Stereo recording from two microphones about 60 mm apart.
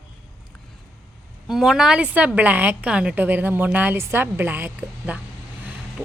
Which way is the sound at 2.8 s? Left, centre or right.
Centre.